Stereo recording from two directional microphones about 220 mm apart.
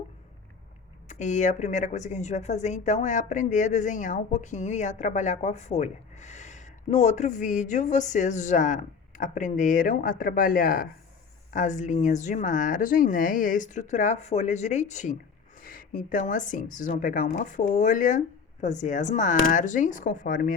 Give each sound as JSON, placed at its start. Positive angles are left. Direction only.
{"t": 1.0, "sound": "a woman's voice", "side_deg": 35}